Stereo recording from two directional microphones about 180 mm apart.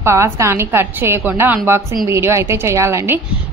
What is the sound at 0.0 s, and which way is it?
A woman's voice, 15° right (ahead or behind).